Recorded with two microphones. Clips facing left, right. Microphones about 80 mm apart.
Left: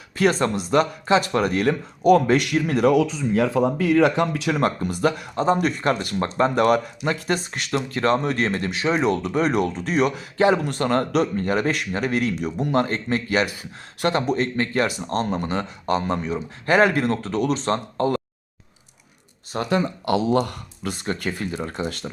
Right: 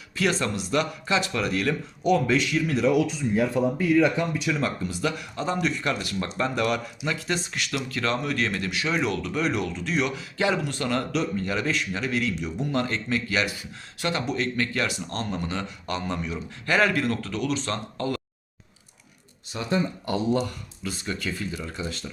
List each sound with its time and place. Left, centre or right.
0.2 s speech: left
3.3 s speech: left
19.5 s speech: left
20.4 s speech: left